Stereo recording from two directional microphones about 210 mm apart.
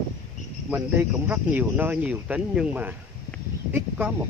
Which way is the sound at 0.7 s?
10° right (ahead or behind).